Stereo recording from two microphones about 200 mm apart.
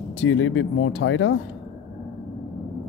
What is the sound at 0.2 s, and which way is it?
Speech, 70° left (ahead or behind).